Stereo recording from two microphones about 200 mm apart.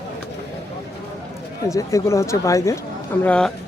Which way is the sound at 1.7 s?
15° left (ahead or behind).